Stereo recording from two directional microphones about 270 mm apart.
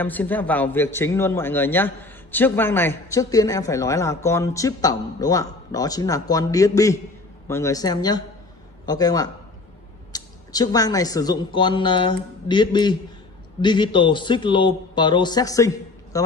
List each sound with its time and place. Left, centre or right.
0.0 s a man's voice: centre